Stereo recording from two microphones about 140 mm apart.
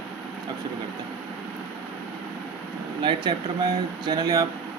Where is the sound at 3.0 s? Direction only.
35° right (ahead or behind).